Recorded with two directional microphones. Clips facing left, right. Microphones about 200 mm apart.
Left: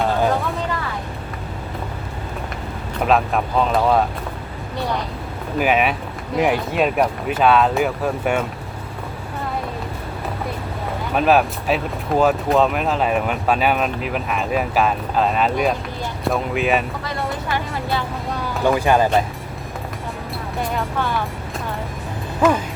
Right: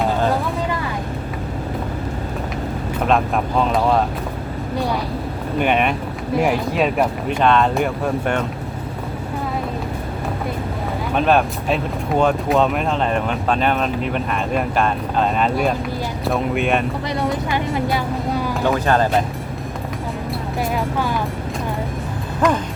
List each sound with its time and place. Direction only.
3.1 s speech: centre (ahead or behind)
5.5 s speech: 5° left (ahead or behind)
11.1 s speech: 5° left (ahead or behind)
17.5 s speech: 20° right (ahead or behind)
18.6 s speech: 10° left (ahead or behind)
20.6 s speech: centre (ahead or behind)
22.4 s speech: 5° left (ahead or behind)